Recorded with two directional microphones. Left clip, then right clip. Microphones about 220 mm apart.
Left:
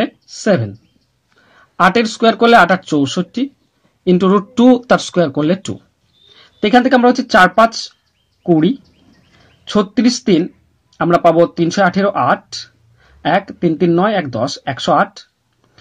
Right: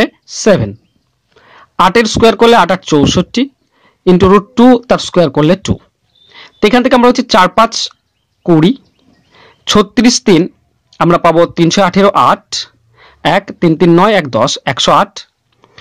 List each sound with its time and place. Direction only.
0.0 s speech: 30° right (ahead or behind)